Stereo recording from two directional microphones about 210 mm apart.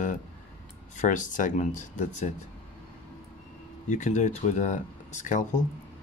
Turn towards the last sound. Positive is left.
turn(degrees=35)  # may be behind; listen again after turning